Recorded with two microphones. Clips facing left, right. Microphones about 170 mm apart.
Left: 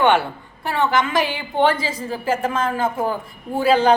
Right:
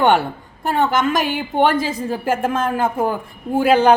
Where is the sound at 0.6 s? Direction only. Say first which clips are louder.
Right 2 dB; 50° right (ahead or behind).